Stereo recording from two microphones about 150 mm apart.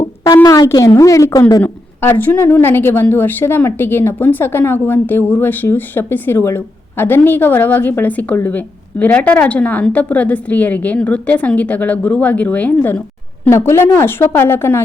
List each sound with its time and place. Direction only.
0.4 s a woman's voice: 25° left (ahead or behind)
1.6 s a woman's voice: 15° left (ahead or behind)